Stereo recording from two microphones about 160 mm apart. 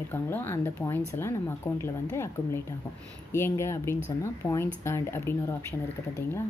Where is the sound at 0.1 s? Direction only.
10° left (ahead or behind).